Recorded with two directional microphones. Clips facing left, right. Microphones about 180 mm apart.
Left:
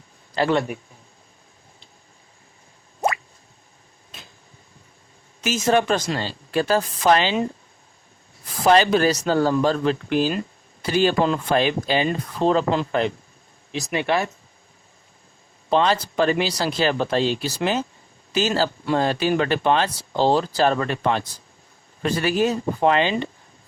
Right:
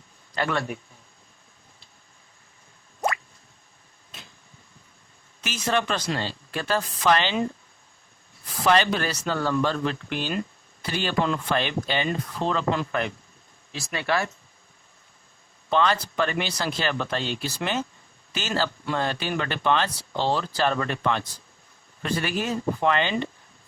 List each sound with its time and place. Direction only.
0.3 s speech: 30° left (ahead or behind)
5.6 s speech: 45° left (ahead or behind)
8.6 s speech: 40° left (ahead or behind)
13.7 s speech: 20° left (ahead or behind)
15.7 s speech: 30° left (ahead or behind)